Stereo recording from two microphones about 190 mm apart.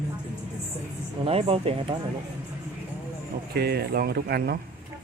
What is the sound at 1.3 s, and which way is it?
Speech, 30° right (ahead or behind).